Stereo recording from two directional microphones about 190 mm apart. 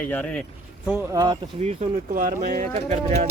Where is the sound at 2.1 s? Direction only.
45° right (ahead or behind).